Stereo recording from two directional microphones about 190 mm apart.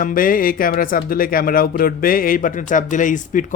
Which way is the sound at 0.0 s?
45° left (ahead or behind).